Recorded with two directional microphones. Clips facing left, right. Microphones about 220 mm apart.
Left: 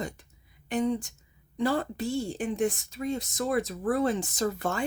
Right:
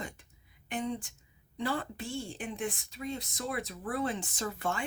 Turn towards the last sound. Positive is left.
turn(degrees=40)  # may be behind; listen again after turning